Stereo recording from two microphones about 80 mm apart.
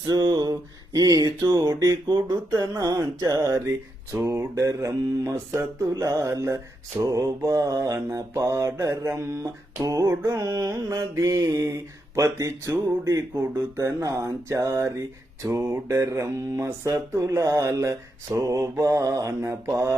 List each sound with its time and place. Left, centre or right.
0.1 s a sound: right
0.9 s speech: right
4.1 s mantra: right
7.9 s mantra: right